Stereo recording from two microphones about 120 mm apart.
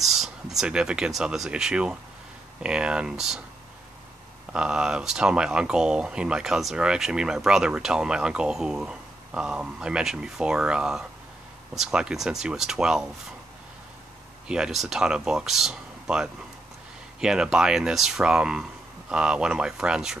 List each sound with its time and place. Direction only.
0.0 s speech: centre (ahead or behind)
4.5 s speech: 5° right (ahead or behind)
14.5 s speech: 5° right (ahead or behind)